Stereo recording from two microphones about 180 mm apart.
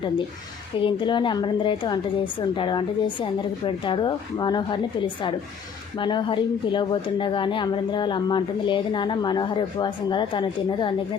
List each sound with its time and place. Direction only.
0.8 s speech: 25° left (ahead or behind)